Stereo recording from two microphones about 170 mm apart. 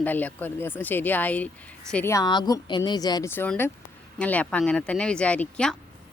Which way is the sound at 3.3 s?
10° left (ahead or behind).